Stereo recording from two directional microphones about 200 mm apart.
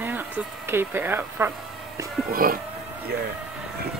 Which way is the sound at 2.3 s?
45° right (ahead or behind).